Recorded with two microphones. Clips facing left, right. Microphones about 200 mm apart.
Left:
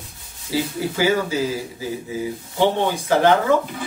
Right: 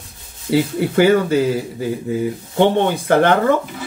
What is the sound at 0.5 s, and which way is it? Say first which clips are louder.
Speech: right 6 dB; 60° right (ahead or behind).